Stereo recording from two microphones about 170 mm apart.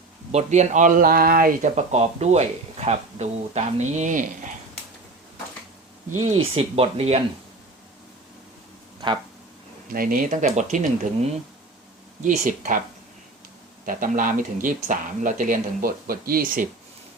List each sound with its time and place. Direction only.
0.3 s speech: 40° right (ahead or behind)
6.3 s speech: 35° right (ahead or behind)
9.9 s speech: 55° right (ahead or behind)
12.5 s speech: 50° right (ahead or behind)
13.8 s speech: 50° right (ahead or behind)